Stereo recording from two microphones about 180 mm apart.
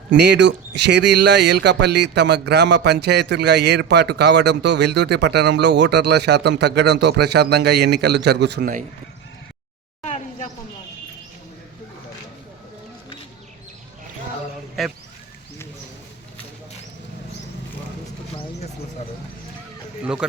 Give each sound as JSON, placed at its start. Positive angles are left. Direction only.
{"t": 0.1, "sound": "speech", "side_deg": -75}
{"t": 10.0, "sound": "a sound", "side_deg": 40}
{"t": 20.0, "sound": "speech", "side_deg": -5}